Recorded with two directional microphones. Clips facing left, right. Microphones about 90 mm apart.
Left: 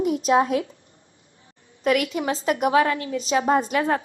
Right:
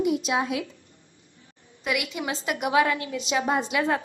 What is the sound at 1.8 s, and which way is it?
A woman's voice, 45° left (ahead or behind).